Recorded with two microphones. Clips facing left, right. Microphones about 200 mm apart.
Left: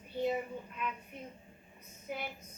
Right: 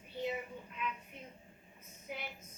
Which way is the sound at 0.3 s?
45° left (ahead or behind).